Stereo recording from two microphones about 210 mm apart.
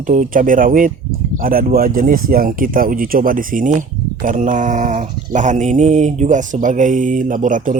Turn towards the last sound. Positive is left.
turn(degrees=-40)  # may be behind; listen again after turning